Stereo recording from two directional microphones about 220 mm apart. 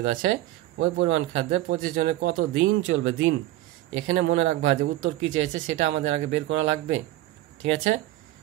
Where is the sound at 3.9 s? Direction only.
35° right (ahead or behind).